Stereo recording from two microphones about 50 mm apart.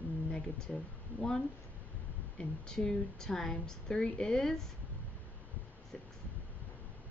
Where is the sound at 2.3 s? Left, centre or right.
Centre.